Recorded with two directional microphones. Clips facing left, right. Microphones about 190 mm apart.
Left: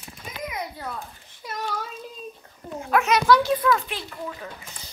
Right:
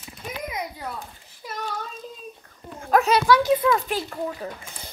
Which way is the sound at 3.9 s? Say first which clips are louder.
Right 6 dB; 45° right (ahead or behind).